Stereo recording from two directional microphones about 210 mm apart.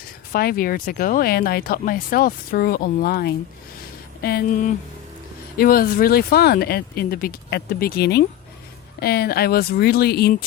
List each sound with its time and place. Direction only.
0.3 s speech: 45° left (ahead or behind)